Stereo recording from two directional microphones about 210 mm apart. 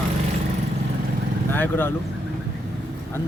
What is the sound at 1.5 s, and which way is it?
Speech, 10° left (ahead or behind).